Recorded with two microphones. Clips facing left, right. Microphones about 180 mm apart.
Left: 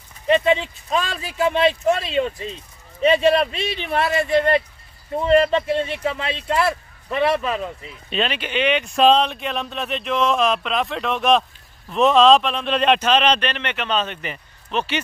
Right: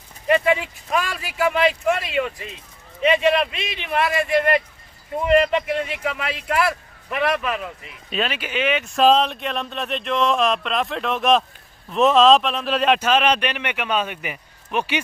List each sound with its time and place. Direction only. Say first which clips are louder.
0.3 s speech: left 1 dB; 25° left (ahead or behind)
8.1 s speech: left 1 dB; 5° right (ahead or behind)